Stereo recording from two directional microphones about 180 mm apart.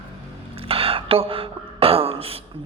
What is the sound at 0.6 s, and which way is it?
A man's voice, 30° right (ahead or behind).